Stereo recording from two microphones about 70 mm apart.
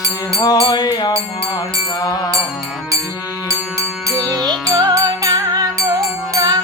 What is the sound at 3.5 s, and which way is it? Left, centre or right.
Music, right.